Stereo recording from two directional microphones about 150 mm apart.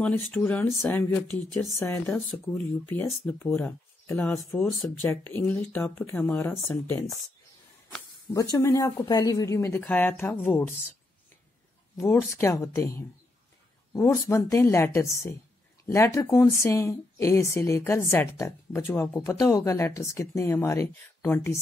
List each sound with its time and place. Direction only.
0.0 s speech: 10° left (ahead or behind)
1.8 s speech: 15° left (ahead or behind)
2.1 s speech: centre (ahead or behind)
2.9 s speech: 15° left (ahead or behind)
8.3 s speech: 20° left (ahead or behind)
12.0 s speech: 15° left (ahead or behind)